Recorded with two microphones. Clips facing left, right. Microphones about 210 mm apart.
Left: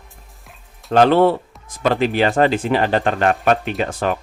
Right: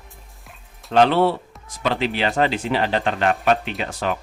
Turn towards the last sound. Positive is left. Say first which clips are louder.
# left 4 dB
turn(degrees=50)  # may be behind; listen again after turning